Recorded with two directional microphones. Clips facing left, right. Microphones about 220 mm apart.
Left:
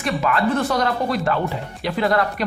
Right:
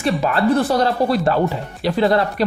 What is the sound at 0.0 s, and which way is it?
A man's voice, 30° right (ahead or behind).